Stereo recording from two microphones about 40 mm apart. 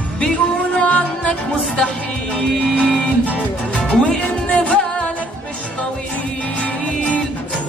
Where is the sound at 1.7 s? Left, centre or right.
Centre.